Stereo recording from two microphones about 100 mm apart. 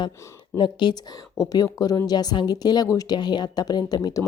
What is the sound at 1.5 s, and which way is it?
Speech, 40° left (ahead or behind).